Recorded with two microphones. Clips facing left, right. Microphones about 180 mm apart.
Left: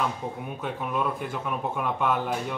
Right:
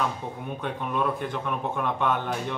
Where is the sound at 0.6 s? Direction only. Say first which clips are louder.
Right 1 dB; 5° left (ahead or behind).